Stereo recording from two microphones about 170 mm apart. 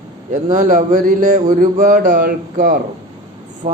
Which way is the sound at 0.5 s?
45° right (ahead or behind).